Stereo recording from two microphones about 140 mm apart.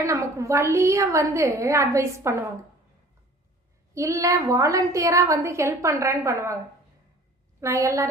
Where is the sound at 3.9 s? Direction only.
20° right (ahead or behind).